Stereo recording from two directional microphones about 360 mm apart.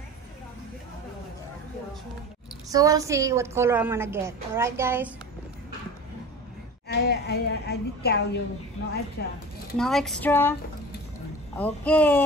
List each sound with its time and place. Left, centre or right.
2.7 s a woman's voice: centre
6.9 s a woman's voice: left
9.8 s speech: centre
11.5 s speech: centre